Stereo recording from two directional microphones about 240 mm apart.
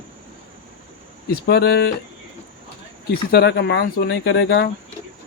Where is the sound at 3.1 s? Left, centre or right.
Left.